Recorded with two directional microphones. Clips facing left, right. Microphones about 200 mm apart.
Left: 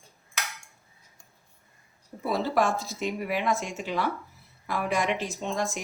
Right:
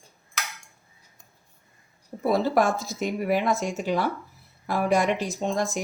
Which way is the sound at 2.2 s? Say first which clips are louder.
Right 4 dB; 45° right (ahead or behind).